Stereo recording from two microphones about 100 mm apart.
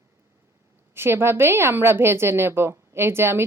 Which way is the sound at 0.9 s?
25° right (ahead or behind).